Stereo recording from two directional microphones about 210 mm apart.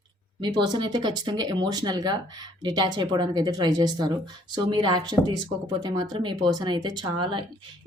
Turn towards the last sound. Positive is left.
turn(degrees=-20)  # may be behind; listen again after turning